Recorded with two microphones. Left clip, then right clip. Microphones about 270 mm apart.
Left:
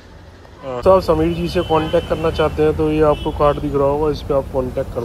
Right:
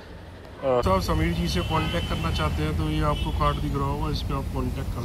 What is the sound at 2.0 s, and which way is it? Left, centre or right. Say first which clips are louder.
Speech: left 11 dB; centre.